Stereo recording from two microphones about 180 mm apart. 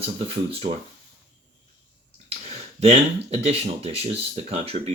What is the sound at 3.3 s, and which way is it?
Speech, 35° right (ahead or behind).